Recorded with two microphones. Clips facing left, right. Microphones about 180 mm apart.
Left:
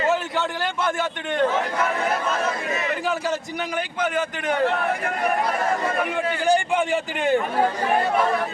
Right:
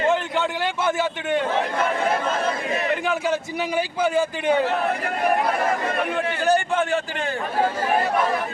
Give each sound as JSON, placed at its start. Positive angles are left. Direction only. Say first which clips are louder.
{"t": 0.1, "sound": "a sound", "louder": "right 1 dB", "side_deg": 0}
{"t": 0.9, "sound": "a man's voice", "louder": "right 3 dB", "side_deg": -10}
{"t": 3.8, "sound": "a man's voice", "louder": "right 4 dB", "side_deg": -10}
{"t": 4.4, "sound": "a man's voice", "louder": "left 1 dB", "side_deg": -35}
{"t": 6.1, "sound": "a man's voice", "louder": "even", "side_deg": 10}